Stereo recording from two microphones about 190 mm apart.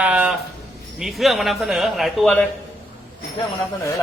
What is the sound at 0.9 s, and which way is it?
Speech, centre (ahead or behind).